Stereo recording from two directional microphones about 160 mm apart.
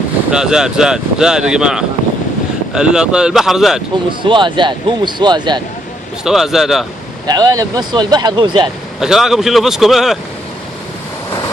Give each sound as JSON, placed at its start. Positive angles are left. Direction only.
{"t": 0.3, "sound": "speech", "side_deg": -5}
{"t": 4.2, "sound": "speech", "side_deg": -30}
{"t": 6.2, "sound": "speech", "side_deg": 0}
{"t": 7.3, "sound": "speech", "side_deg": -25}
{"t": 9.0, "sound": "speech", "side_deg": -5}